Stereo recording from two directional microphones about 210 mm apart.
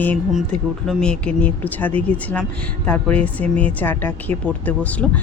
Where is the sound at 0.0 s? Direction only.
10° left (ahead or behind).